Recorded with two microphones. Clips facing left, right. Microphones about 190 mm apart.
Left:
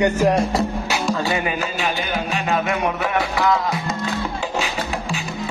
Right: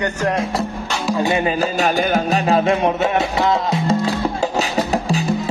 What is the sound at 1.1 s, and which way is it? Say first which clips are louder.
Music: right 8 dB; 20° right (ahead or behind).